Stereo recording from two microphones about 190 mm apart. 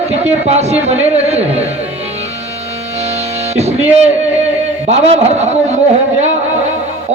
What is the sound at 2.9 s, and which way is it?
Music, 35° right (ahead or behind).